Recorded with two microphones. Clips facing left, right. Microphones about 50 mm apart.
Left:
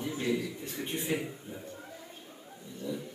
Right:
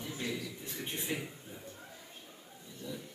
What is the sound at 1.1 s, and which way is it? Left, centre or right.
Speech, left.